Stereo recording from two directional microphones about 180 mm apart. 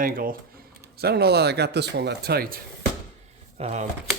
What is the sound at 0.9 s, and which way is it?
Speech, 60° right (ahead or behind).